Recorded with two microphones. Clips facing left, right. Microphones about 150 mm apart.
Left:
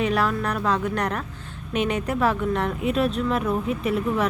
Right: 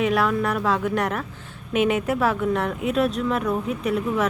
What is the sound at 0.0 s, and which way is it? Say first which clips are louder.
Speech: right 2 dB; centre (ahead or behind).